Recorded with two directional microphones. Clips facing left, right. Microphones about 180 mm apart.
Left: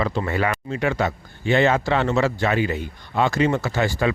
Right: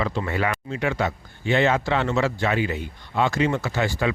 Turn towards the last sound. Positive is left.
turn(degrees=40)  # may be behind; listen again after turning